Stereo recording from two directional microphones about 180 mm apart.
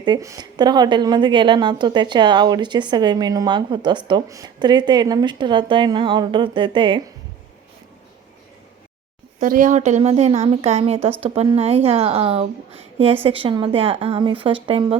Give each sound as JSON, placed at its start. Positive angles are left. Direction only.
{"t": 0.0, "sound": "a woman's voice", "side_deg": -20}
{"t": 9.4, "sound": "a woman's voice", "side_deg": -45}